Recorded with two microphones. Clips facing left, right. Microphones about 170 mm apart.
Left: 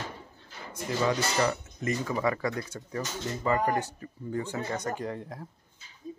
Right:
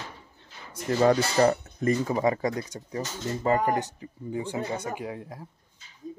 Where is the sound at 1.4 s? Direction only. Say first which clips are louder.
Right 6 dB; 35° right (ahead or behind); by 5.4 s 5° right (ahead or behind).